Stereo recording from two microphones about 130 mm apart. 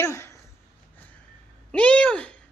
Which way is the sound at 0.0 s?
20° left (ahead or behind).